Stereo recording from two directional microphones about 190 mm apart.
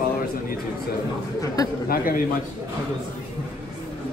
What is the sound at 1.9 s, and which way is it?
Speech, 50° left (ahead or behind).